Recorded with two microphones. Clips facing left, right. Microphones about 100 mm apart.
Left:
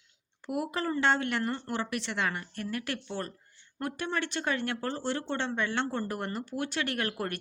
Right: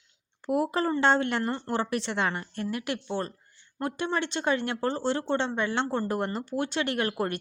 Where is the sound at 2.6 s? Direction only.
20° right (ahead or behind).